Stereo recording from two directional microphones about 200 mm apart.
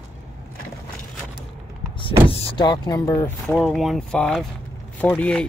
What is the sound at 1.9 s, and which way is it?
Speech, 25° left (ahead or behind).